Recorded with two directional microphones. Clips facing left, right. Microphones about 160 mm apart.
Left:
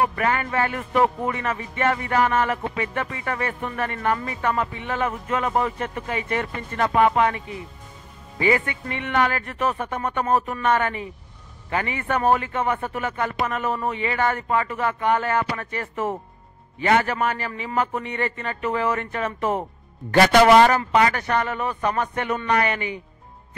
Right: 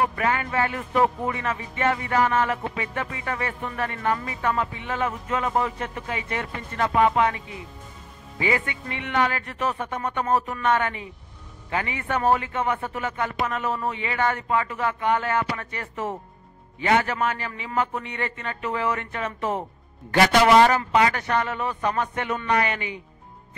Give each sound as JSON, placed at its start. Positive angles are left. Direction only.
{"t": 0.2, "sound": "speech", "side_deg": 50}
{"t": 1.3, "sound": "music", "side_deg": 50}
{"t": 8.4, "sound": "speech", "side_deg": 50}